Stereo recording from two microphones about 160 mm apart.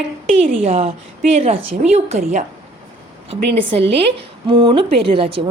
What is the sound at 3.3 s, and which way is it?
A woman's voice, 30° right (ahead or behind).